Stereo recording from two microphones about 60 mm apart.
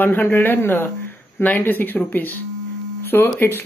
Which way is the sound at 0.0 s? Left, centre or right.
Left.